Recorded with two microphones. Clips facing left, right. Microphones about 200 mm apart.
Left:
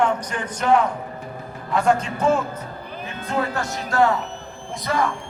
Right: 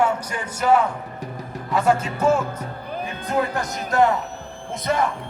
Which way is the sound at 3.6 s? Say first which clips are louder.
Left 1 dB; 20° right (ahead or behind).